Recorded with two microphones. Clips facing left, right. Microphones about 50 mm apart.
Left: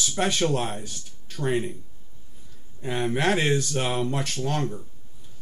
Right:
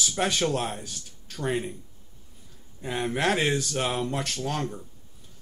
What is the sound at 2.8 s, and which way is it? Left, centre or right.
Speech, centre.